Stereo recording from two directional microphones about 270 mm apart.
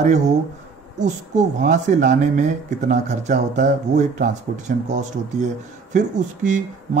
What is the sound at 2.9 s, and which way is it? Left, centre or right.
Speech, right.